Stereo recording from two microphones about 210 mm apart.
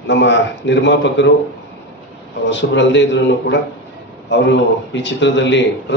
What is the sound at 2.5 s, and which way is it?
A man's voice, 60° left (ahead or behind).